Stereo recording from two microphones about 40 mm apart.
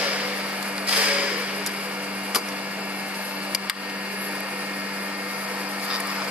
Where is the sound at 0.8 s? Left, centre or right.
Right.